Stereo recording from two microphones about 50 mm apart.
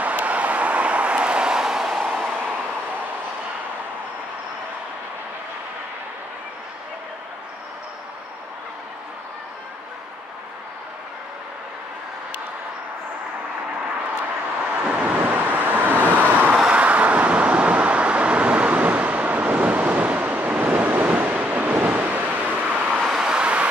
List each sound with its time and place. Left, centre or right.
0.0 s vehicle: right; by 2.0 s centre
2.0 s vehicle: right
14.8 s vehicle: right
16.5 s vehicle: right
22.9 s vehicle: centre
23.2 s vehicle: right